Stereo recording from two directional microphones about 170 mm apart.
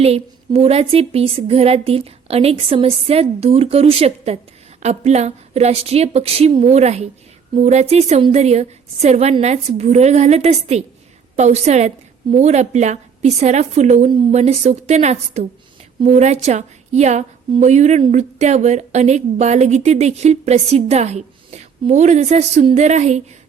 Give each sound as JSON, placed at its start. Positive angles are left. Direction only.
{"t": 0.0, "sound": "a woman's voice", "side_deg": -35}